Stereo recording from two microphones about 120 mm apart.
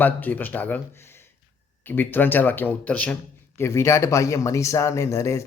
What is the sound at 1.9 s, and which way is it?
Speech, 15° left (ahead or behind).